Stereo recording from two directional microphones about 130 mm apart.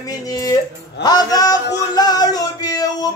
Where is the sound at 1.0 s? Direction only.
30° left (ahead or behind).